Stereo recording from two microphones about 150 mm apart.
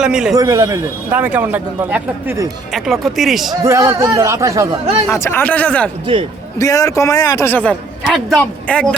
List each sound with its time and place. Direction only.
0.0 s speech: 5° right (ahead or behind)
0.3 s a man's voice: 20° right (ahead or behind)
2.7 s speech: centre (ahead or behind)
3.5 s speech: 20° right (ahead or behind)
5.0 s speech: 15° left (ahead or behind)
6.6 s a man's voice: 25° left (ahead or behind)
8.0 s speech: 5° right (ahead or behind)
8.4 s speech: 10° left (ahead or behind)